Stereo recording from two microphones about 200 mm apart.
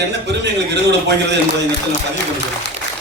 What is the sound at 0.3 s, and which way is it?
A man's voice, 55° right (ahead or behind).